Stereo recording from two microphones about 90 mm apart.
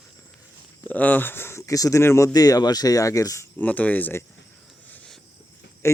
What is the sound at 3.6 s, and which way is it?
Speech, 15° left (ahead or behind).